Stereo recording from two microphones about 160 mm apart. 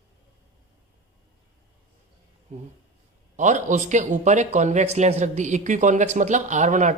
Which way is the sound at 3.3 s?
50° right (ahead or behind).